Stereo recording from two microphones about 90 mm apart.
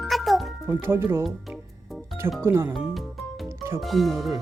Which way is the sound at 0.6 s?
25° right (ahead or behind).